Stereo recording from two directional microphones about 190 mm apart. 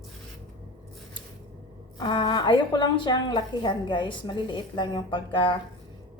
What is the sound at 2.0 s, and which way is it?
A woman's voice, 25° left (ahead or behind).